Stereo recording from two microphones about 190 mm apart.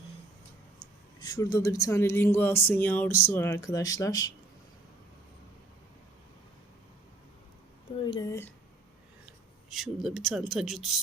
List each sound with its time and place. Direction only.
1.2 s speech: 20° left (ahead or behind)
8.0 s speech: 20° left (ahead or behind)
9.2 s speech: centre (ahead or behind)